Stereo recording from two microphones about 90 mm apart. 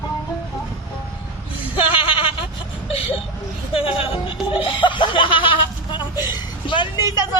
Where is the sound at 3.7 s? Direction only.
90° left; by 6.2 s 55° left (ahead or behind).